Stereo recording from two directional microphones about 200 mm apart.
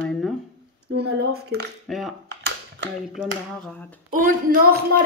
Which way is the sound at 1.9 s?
Centre (ahead or behind).